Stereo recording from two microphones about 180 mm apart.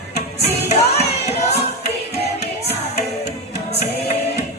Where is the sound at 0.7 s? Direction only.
35° left (ahead or behind).